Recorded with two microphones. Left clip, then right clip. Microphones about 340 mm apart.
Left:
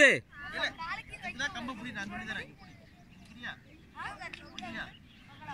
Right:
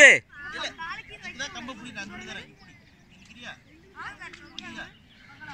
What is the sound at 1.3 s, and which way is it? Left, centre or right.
Speech, centre.